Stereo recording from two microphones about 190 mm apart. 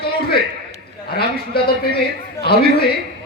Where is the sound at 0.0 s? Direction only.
55° left (ahead or behind).